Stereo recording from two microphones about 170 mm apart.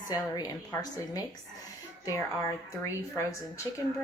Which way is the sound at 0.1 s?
20° left (ahead or behind).